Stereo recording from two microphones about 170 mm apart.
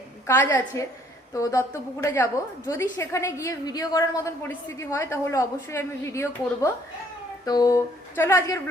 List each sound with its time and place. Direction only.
0.3 s a woman's voice: 15° left (ahead or behind)